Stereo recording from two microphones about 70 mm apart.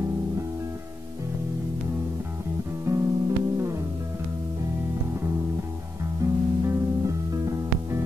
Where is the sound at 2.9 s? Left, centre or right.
Right.